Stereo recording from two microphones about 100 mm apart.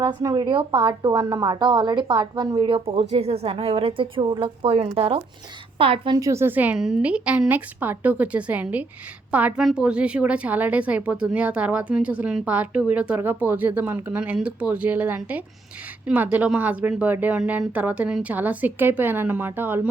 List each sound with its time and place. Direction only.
0.2 s a woman's voice: 40° right (ahead or behind); by 5.2 s 80° right
5.7 s a woman's voice: 65° right (ahead or behind)
6.1 s speech: 30° right (ahead or behind)
6.7 s a woman's voice: 5° right (ahead or behind); by 19.9 s 20° right (ahead or behind)